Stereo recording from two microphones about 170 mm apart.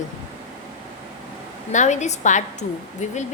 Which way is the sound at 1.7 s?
45° left (ahead or behind).